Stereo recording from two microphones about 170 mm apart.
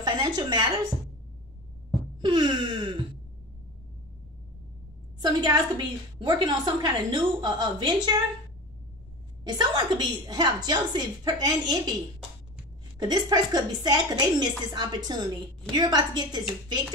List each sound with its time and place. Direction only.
0.0 s a sound: 25° right (ahead or behind)
2.2 s wail: 25° right (ahead or behind)
5.2 s a woman's voice: 25° right (ahead or behind)
9.4 s a woman's voice: 25° right (ahead or behind)
13.0 s a woman's voice: 25° right (ahead or behind)